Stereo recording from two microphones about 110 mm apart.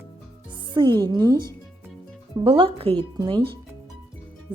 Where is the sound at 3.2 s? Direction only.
45° right (ahead or behind).